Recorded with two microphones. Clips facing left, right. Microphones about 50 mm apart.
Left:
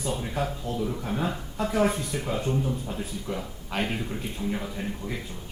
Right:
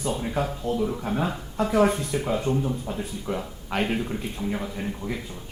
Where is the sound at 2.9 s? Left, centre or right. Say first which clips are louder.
Right 3 dB; centre.